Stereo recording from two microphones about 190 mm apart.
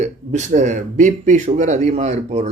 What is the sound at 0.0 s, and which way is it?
Speech, 40° right (ahead or behind).